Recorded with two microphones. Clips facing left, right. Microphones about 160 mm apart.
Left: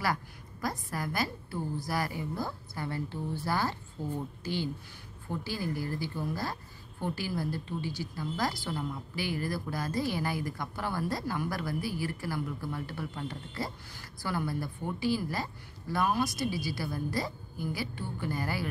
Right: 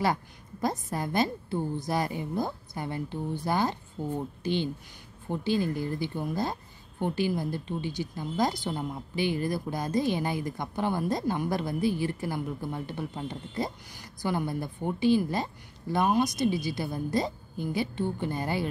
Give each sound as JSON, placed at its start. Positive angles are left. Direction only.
{"t": 0.0, "sound": "speech", "side_deg": -25}